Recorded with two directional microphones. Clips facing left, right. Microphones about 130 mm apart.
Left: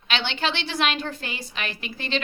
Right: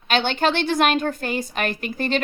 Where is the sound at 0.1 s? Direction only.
45° right (ahead or behind).